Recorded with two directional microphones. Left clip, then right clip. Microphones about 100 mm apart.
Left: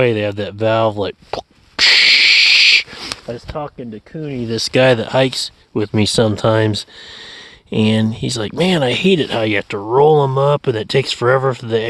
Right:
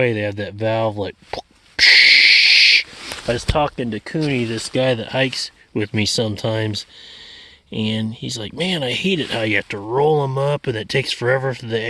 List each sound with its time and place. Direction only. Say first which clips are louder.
0.0 s a sound: left 4 dB; 25° left (ahead or behind)
3.3 s speech: right 7 dB; 30° right (ahead or behind)
3.8 s speech: right 6 dB; 45° right (ahead or behind)
4.8 s speech: left 7 dB; 55° left (ahead or behind)
5.0 s speech: left 5 dB; 35° left (ahead or behind)
5.7 s speech: left 4 dB; 20° left (ahead or behind)
6.0 s speech: left 6 dB; 50° left (ahead or behind)
9.1 s speech: left 3 dB; 30° left (ahead or behind)